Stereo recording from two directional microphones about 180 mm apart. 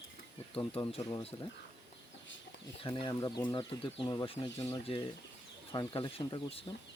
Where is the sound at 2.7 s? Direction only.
30° left (ahead or behind).